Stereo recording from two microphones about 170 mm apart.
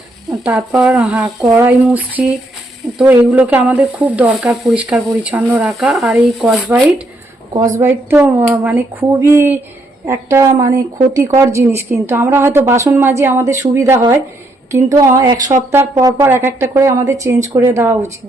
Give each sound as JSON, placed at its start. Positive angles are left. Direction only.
{"t": 0.4, "sound": "a woman's voice", "side_deg": -5}
{"t": 7.8, "sound": "a woman's voice", "side_deg": -15}